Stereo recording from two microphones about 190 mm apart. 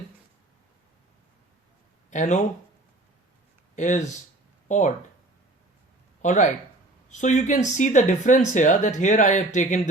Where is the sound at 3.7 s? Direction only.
40° left (ahead or behind).